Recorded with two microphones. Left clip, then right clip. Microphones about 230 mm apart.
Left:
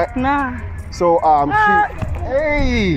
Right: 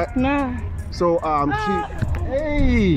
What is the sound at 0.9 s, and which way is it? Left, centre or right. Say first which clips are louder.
Speech: left 6 dB; left.